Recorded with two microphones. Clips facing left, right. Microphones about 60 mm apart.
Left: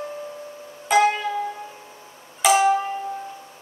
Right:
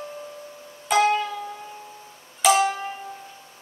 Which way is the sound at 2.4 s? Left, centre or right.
Centre.